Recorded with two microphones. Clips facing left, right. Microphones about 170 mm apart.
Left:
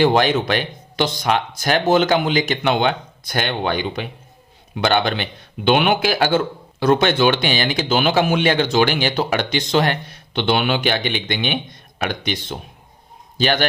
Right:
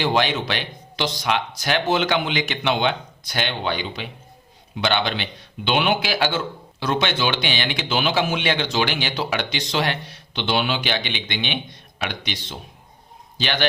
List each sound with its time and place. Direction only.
0.0 s a man's voice: 50° left (ahead or behind)